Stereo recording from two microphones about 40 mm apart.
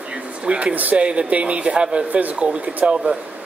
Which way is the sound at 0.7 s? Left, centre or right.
Right.